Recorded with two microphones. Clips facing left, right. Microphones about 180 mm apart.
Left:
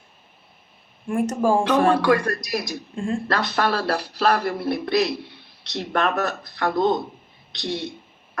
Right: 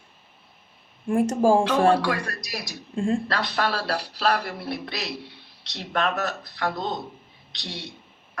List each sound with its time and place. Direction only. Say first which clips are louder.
1.0 s speech: right 1 dB; 30° right (ahead or behind)
2.0 s speech: left 7 dB; 50° left (ahead or behind)
2.9 s speech: right 3 dB; 35° right (ahead or behind)
3.2 s speech: left 3 dB; 50° left (ahead or behind)